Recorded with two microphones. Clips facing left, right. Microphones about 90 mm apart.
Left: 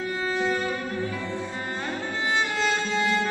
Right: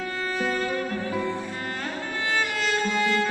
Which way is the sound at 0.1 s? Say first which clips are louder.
Left 2 dB; 20° left (ahead or behind).